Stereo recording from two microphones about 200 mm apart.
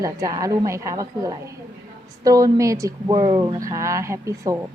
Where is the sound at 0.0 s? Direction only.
15° right (ahead or behind).